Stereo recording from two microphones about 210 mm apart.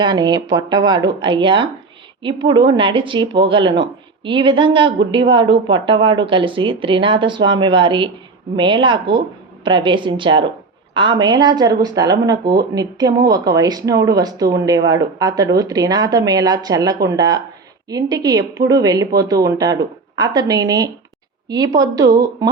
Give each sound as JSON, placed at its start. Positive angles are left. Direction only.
{"t": 0.0, "sound": "speech", "side_deg": -20}